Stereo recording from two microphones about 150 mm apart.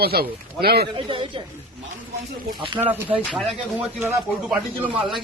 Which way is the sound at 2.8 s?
10° right (ahead or behind).